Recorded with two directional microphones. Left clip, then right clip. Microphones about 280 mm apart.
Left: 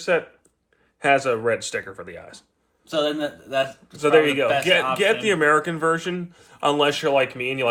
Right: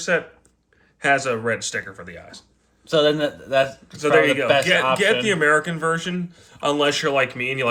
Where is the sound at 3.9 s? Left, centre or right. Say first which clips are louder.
Even; centre.